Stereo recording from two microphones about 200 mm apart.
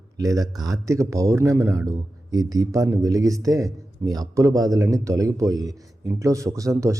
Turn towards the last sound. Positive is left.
turn(degrees=-15)  # may be behind; listen again after turning